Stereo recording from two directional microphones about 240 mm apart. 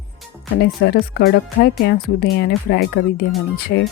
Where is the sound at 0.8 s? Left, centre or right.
Left.